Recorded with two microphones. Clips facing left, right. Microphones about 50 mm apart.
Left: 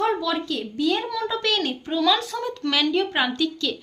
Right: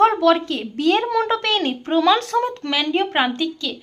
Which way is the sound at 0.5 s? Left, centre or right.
Right.